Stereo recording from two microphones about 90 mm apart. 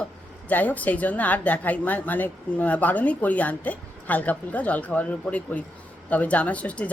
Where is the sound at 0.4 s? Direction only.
15° left (ahead or behind).